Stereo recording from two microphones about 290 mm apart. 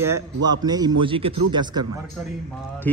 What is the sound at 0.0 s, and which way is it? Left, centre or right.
A man's voice, centre.